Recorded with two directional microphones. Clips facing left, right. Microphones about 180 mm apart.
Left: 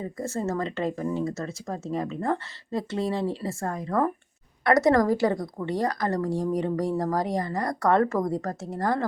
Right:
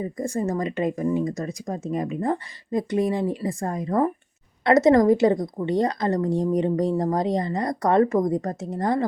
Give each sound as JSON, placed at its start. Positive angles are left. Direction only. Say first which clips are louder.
{"t": 0.0, "sound": "a woman's voice", "louder": "right 4 dB", "side_deg": -15}